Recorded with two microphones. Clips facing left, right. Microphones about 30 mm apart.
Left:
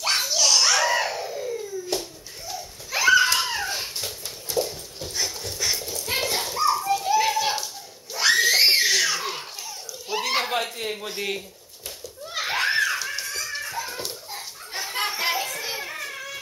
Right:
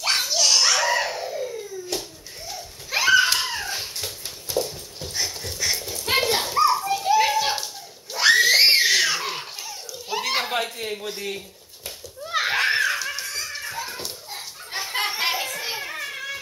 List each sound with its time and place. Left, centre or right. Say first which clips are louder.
0.0 s belly laugh: right 1 dB; centre
2.9 s a sound: even; centre
3.3 s dog: left 1 dB; centre
5.0 s dog: even; centre
6.1 s children playing: right 5 dB; right; by 7.6 s centre
8.1 s belly laugh: right 3 dB; centre
12.5 s children playing: left 1 dB; centre
13.7 s a sound: left 1 dB; centre